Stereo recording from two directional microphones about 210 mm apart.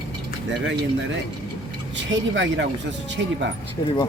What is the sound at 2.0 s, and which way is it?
Speech, 60° right (ahead or behind).